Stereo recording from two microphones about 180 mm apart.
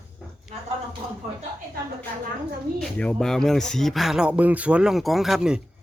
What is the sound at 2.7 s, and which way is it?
Speech, 5° left (ahead or behind).